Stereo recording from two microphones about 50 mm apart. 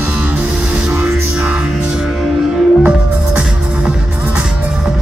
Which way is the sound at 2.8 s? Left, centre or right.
Right.